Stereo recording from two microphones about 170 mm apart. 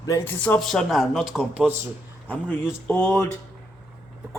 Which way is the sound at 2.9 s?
10° left (ahead or behind).